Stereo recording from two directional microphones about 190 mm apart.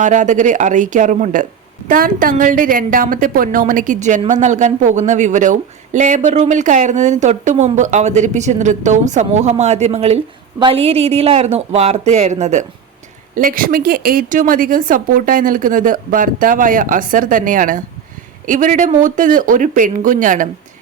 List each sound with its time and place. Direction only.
0.0 s a woman's voice: 40° right (ahead or behind)